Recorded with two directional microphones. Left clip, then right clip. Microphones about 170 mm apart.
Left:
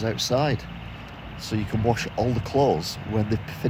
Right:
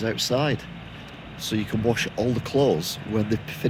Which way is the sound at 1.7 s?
25° left (ahead or behind).